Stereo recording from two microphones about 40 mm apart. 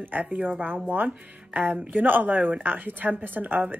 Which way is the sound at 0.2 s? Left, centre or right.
Right.